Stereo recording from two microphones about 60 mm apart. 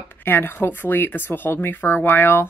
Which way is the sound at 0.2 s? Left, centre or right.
Left.